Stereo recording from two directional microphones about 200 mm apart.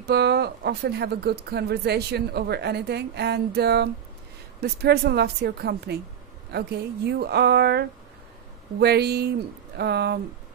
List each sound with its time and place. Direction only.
0.0 s speech: 55° right (ahead or behind)